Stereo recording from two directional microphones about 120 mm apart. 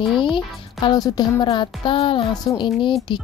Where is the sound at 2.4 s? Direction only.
40° left (ahead or behind).